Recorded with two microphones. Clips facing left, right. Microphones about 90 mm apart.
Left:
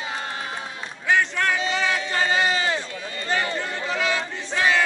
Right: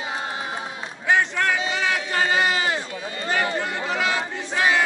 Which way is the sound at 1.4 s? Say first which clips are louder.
Even; 15° right (ahead or behind).